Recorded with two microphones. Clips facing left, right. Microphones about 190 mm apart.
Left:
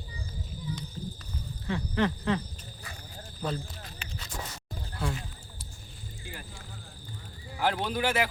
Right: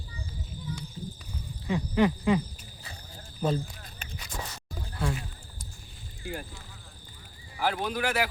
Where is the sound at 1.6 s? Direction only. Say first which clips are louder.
Right 4 dB; 15° right (ahead or behind).